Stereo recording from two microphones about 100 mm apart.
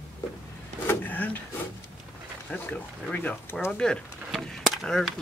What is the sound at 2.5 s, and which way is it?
Speech, 15° left (ahead or behind).